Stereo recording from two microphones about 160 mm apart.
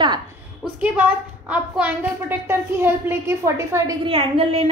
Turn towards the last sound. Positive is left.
turn(degrees=-35)  # may be behind; listen again after turning